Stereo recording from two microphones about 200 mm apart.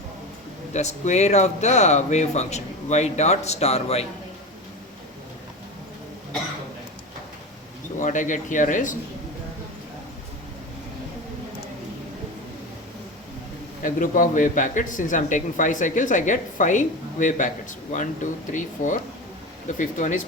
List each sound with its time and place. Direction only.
0.7 s speech: 35° left (ahead or behind)
7.9 s speech: 40° left (ahead or behind)
13.8 s speech: 40° left (ahead or behind)